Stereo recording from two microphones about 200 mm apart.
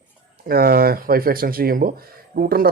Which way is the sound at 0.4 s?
50° right (ahead or behind).